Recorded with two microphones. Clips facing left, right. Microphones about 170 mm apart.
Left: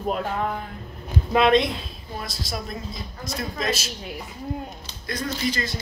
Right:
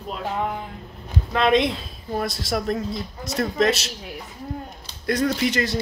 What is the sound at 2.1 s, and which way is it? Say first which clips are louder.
Speech: right 8 dB; 70° right (ahead or behind).